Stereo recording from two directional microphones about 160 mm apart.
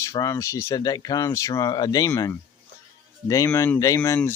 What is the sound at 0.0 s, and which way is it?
Speech, 20° left (ahead or behind).